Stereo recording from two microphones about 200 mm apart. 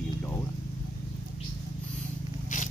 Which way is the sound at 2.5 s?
40° left (ahead or behind).